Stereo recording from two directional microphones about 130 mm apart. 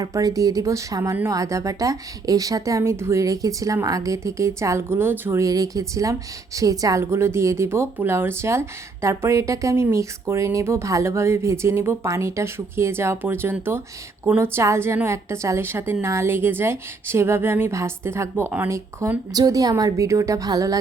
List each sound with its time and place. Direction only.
0.0 s a woman's voice: 25° right (ahead or behind)